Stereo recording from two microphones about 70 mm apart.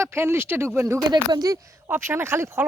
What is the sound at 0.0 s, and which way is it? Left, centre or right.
Speech, right.